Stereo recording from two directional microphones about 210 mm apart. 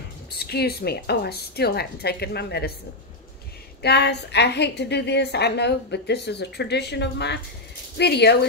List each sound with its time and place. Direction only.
0.3 s a woman's voice: 50° left (ahead or behind)
3.8 s a woman's voice: 55° left (ahead or behind)